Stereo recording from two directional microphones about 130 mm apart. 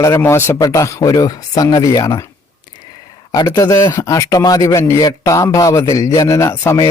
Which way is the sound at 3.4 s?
25° left (ahead or behind).